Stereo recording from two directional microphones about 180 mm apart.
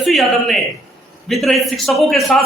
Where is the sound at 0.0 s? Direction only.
Centre (ahead or behind).